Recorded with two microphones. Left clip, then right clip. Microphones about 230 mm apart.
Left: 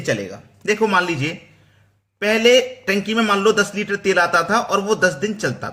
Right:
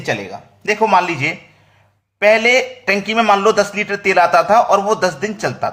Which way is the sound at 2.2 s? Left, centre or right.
Centre.